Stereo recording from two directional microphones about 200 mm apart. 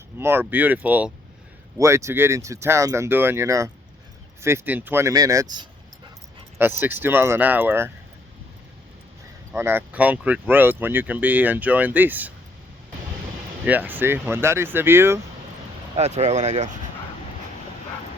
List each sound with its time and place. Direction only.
0.2 s speech: 10° right (ahead or behind)
9.6 s speech: 10° right (ahead or behind)
13.7 s speech: 10° right (ahead or behind)
16.0 s speech: 35° right (ahead or behind)